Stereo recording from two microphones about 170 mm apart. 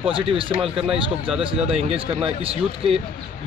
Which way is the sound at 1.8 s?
35° right (ahead or behind).